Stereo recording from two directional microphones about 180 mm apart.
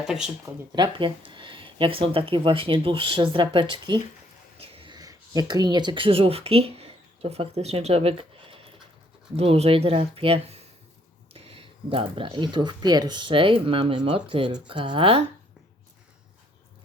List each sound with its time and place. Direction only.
0.0 s speech: 5° right (ahead or behind)
0.7 s speech: 25° right (ahead or behind)